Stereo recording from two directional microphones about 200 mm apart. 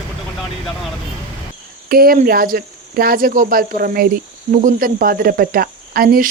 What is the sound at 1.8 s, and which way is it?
Speech, 45° right (ahead or behind).